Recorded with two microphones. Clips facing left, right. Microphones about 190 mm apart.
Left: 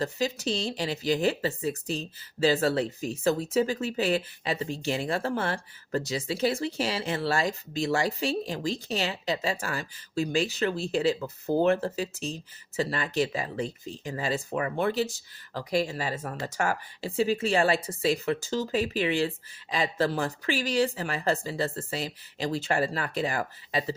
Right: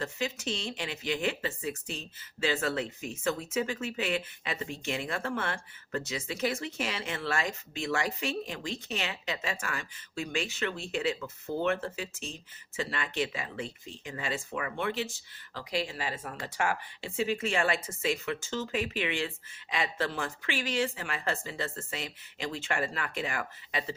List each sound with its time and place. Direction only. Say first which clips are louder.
0.0 s speech: left 5 dB; 35° left (ahead or behind)